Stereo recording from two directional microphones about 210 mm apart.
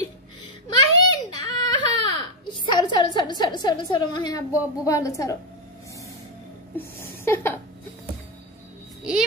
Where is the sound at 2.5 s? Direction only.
20° left (ahead or behind).